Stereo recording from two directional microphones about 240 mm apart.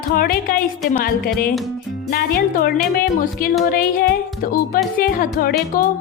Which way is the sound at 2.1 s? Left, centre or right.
Left.